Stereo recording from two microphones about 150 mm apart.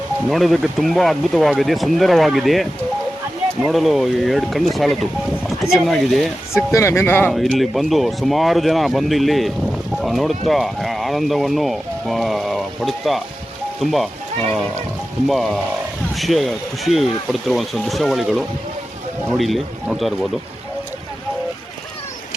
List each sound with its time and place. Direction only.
0.3 s speech: centre (ahead or behind)
6.7 s speech: 20° left (ahead or behind)
7.3 s speech: centre (ahead or behind)
15.3 s speech: centre (ahead or behind)